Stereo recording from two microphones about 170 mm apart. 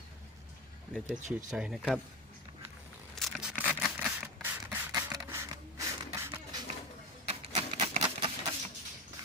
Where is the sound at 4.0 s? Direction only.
10° right (ahead or behind).